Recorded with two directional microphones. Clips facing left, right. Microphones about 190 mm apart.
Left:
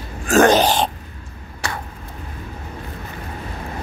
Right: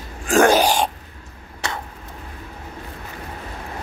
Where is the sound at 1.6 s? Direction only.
25° right (ahead or behind).